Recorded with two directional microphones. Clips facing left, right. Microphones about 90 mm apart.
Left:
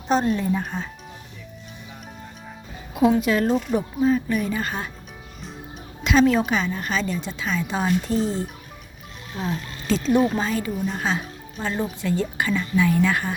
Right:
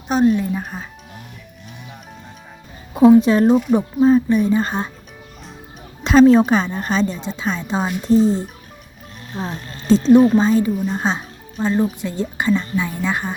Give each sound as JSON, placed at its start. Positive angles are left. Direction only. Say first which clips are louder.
{"t": 0.1, "sound": "speech", "louder": "right 4 dB", "side_deg": -5}
{"t": 3.2, "sound": "a woman's voice", "louder": "right 7 dB", "side_deg": -30}
{"t": 6.0, "sound": "a woman's voice", "louder": "right 7 dB", "side_deg": -35}
{"t": 9.3, "sound": "speech", "louder": "right 1 dB", "side_deg": -30}
{"t": 11.6, "sound": "speech", "louder": "right 7 dB", "side_deg": -20}